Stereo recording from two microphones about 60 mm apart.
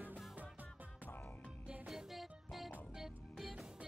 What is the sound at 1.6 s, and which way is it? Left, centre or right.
Music, right.